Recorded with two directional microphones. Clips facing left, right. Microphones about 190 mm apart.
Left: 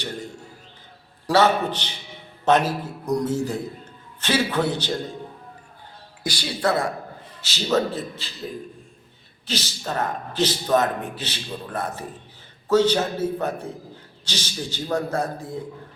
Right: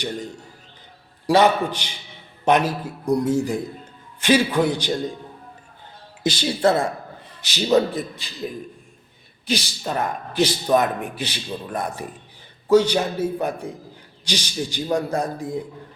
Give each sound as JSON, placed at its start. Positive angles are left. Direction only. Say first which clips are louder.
{"t": 1.3, "sound": "speech", "louder": "right 2 dB", "side_deg": -15}
{"t": 6.2, "sound": "a woman's voice", "louder": "right 5 dB", "side_deg": -25}
{"t": 7.4, "sound": "speech", "louder": "right 4 dB", "side_deg": -15}
{"t": 9.5, "sound": "speech", "louder": "right 4 dB", "side_deg": -10}